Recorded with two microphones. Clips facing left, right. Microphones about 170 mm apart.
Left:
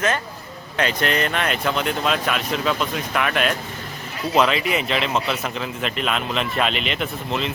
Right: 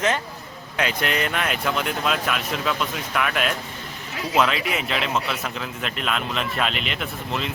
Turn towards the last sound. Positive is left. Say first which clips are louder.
# left 3 dB
turn(degrees=0)  # may be behind; listen again after turning